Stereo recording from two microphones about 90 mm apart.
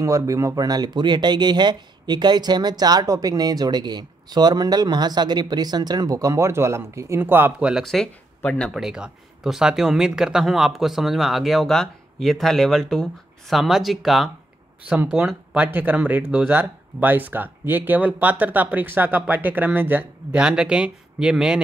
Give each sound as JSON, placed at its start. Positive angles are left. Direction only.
{"t": 0.0, "sound": "speech", "side_deg": -35}
{"t": 7.5, "sound": "speech", "side_deg": -10}
{"t": 7.8, "sound": "speech", "side_deg": 5}
{"t": 8.7, "sound": "speech", "side_deg": -5}
{"t": 15.0, "sound": "speech", "side_deg": -20}
{"t": 20.4, "sound": "speech", "side_deg": -10}